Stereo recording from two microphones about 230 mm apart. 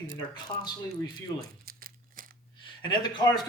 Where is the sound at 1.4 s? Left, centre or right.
Right.